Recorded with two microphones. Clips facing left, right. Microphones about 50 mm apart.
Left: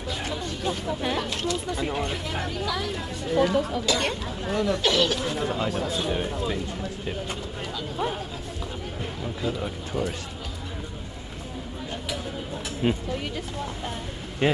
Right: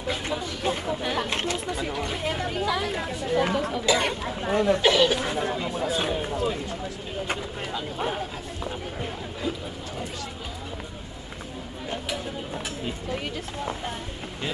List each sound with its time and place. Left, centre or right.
0.8 s a sound: centre
1.2 s a sound: right
2.5 s chatter: right
3.1 s chatter: centre
3.5 s speech: centre; by 4.9 s right
4.9 s speech: centre
5.2 s speech: right
7.7 s a sound: centre
12.8 s speech: left
14.4 s speech: left